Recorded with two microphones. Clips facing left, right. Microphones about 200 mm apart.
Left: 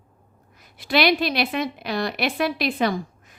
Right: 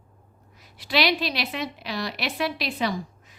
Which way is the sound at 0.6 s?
50° left (ahead or behind).